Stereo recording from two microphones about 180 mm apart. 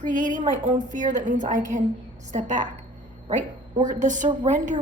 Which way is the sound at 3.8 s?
45° right (ahead or behind).